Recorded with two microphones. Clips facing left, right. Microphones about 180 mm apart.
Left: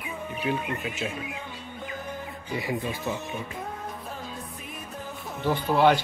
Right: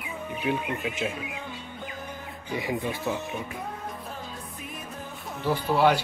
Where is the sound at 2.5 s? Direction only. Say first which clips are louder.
Right 1 dB; 15° right (ahead or behind).